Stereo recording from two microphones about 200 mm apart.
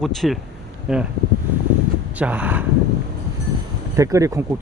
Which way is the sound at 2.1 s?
5° right (ahead or behind).